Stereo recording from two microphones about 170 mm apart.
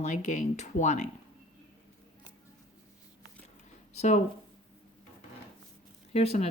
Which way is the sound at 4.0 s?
40° left (ahead or behind).